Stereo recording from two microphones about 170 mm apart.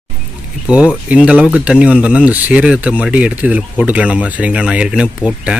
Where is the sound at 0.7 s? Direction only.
5° right (ahead or behind).